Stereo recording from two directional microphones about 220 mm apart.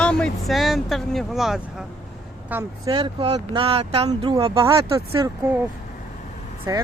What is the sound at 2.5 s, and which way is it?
Speech, 10° right (ahead or behind).